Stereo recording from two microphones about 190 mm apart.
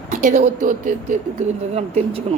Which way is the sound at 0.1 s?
40° right (ahead or behind).